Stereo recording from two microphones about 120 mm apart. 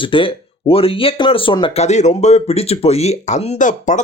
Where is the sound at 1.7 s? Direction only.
70° left (ahead or behind).